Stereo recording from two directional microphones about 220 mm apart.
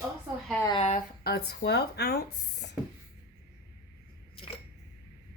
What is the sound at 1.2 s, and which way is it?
Speech, 45° left (ahead or behind).